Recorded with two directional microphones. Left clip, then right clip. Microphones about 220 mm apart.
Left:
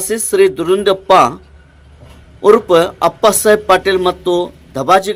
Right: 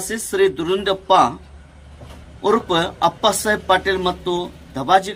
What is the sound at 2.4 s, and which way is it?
Speech, 25° left (ahead or behind).